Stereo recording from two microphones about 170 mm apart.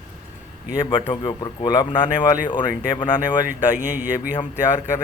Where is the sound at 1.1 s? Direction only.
25° left (ahead or behind).